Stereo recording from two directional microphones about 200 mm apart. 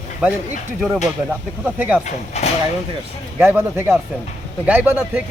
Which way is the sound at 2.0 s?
30° left (ahead or behind).